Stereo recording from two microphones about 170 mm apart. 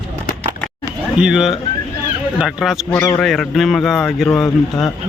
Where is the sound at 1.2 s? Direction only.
5° right (ahead or behind).